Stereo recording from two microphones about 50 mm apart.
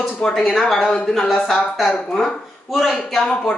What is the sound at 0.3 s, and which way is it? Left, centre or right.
A woman's voice, centre.